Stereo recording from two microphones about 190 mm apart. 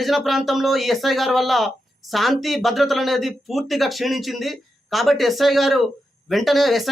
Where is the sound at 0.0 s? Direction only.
Centre (ahead or behind).